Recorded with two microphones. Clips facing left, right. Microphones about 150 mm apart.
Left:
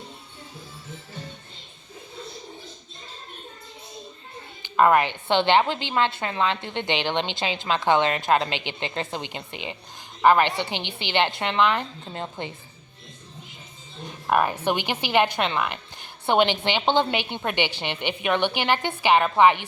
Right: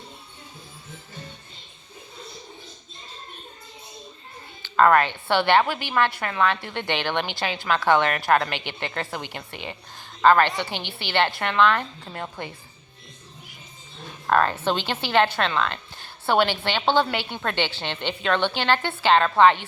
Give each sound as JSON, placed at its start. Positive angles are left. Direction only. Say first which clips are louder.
{"t": 4.6, "sound": "a woman's voice", "louder": "right 1 dB", "side_deg": 15}
{"t": 14.0, "sound": "a woman's voice", "louder": "right 1 dB", "side_deg": 15}